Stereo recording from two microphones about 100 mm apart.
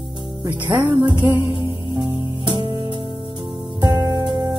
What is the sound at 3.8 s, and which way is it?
Music, 45° right (ahead or behind).